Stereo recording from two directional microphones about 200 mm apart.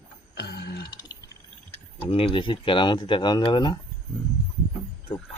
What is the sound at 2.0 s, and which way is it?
Speech, 30° left (ahead or behind).